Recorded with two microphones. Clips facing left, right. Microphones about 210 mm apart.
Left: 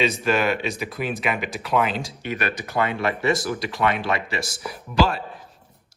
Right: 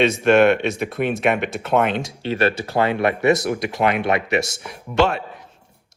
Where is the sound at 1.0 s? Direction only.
50° right (ahead or behind).